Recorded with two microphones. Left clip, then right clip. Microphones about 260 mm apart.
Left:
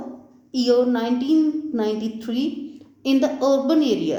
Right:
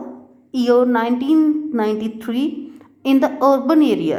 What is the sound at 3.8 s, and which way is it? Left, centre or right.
Speech, right.